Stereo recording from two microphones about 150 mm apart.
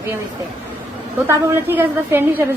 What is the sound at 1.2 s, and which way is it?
A woman's voice, 15° right (ahead or behind).